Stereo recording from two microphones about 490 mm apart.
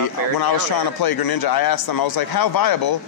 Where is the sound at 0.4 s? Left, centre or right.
Left.